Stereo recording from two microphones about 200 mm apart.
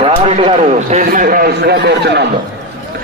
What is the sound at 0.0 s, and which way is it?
A man's voice, 25° right (ahead or behind).